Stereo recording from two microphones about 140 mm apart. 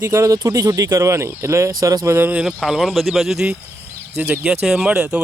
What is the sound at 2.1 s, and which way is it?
Speech, 10° right (ahead or behind).